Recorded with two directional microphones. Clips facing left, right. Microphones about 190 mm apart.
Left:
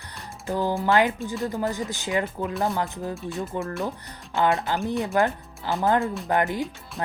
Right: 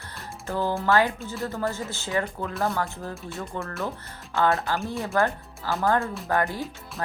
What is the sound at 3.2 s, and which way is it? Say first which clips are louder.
Speech: left 4 dB; centre (ahead or behind).